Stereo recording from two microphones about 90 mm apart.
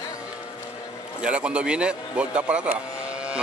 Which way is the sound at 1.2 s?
15° right (ahead or behind).